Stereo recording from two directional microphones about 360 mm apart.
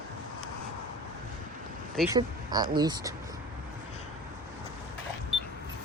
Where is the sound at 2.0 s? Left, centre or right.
Centre.